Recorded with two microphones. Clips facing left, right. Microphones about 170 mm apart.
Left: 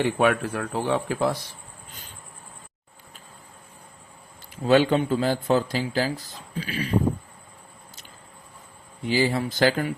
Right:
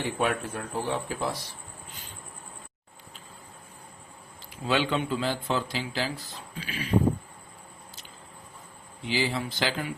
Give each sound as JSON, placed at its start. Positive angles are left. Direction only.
{"t": 0.0, "sound": "a man's voice", "side_deg": 70}
{"t": 4.6, "sound": "speech", "side_deg": 45}
{"t": 9.0, "sound": "speech", "side_deg": 45}